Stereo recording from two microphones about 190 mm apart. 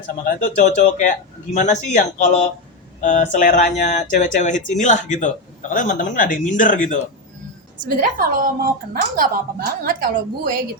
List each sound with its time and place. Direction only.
0.3 s speech: 40° left (ahead or behind)
7.8 s a woman's voice: 45° right (ahead or behind)